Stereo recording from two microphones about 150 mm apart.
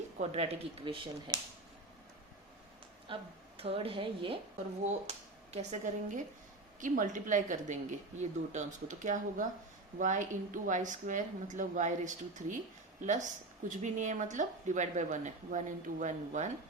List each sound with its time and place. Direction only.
0.2 s speech: 45° right (ahead or behind)
3.1 s speech: 35° right (ahead or behind)
4.9 s speech: 45° right (ahead or behind)